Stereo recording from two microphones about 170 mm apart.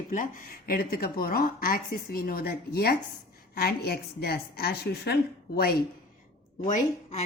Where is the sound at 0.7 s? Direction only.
60° left (ahead or behind).